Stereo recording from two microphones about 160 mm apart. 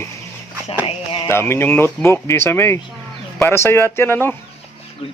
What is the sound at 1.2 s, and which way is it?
Speech, 15° left (ahead or behind).